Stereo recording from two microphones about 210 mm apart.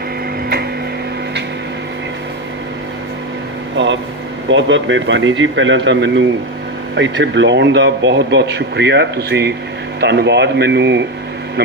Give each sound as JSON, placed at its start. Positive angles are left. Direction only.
{"t": 4.4, "sound": "speech", "side_deg": -60}